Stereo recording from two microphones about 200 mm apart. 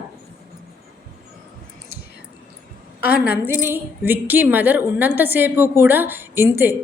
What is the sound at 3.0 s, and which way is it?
Speech, 50° left (ahead or behind).